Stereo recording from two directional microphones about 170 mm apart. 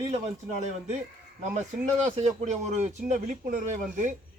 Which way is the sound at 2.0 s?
40° right (ahead or behind).